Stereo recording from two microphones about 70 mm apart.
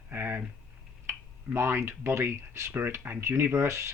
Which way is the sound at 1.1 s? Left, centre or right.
Right.